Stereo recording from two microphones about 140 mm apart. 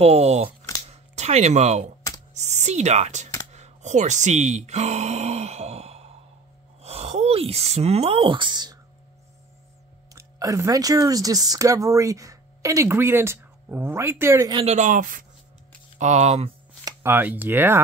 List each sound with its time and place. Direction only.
0.0 s speech: 50° right (ahead or behind)
0.8 s a sound: 50° right (ahead or behind)
2.3 s speech: 55° right (ahead or behind); by 8.7 s 30° right (ahead or behind)
10.1 s speech: 25° right (ahead or behind)
14.5 s speech: 45° right (ahead or behind)
14.8 s speech: 70° right (ahead or behind)
16.0 s speech: 55° right (ahead or behind)
16.8 s speech: 15° right (ahead or behind)